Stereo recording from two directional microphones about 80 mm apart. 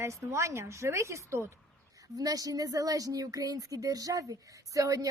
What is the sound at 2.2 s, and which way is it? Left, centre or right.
A woman's voice, right.